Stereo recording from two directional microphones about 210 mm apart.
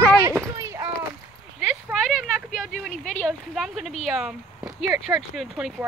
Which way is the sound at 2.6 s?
Centre (ahead or behind).